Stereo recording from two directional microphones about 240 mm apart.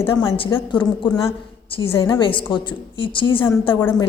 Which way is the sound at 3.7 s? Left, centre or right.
Centre.